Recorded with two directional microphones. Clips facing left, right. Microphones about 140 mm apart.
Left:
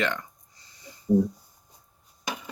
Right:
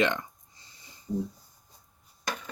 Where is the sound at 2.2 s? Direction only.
10° left (ahead or behind).